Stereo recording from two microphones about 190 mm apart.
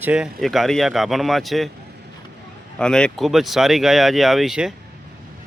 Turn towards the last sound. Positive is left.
turn(degrees=0)  # may be behind; listen again after turning